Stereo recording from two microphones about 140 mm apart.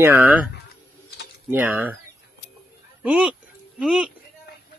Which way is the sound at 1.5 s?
10° right (ahead or behind).